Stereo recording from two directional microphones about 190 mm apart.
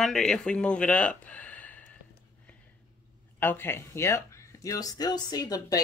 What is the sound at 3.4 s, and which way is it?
Speech, 10° left (ahead or behind).